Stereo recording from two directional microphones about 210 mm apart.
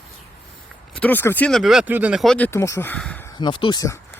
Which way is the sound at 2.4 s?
15° left (ahead or behind).